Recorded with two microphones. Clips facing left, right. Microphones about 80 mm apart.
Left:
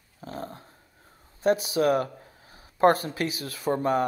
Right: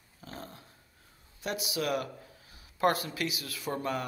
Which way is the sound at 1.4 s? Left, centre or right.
Left.